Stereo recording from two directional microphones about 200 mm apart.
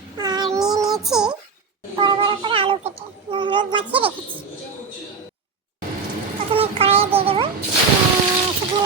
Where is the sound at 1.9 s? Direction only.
25° right (ahead or behind).